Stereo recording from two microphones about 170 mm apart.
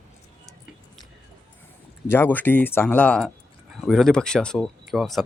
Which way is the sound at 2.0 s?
10° left (ahead or behind).